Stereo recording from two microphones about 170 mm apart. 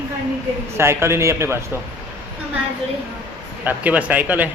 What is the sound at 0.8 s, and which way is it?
Speech, 15° right (ahead or behind).